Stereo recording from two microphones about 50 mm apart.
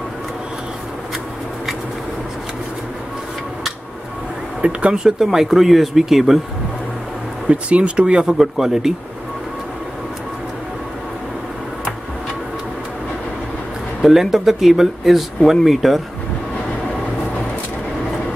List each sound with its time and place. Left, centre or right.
4.6 s speech: right; by 6.4 s centre
7.4 s speech: right
14.0 s speech: centre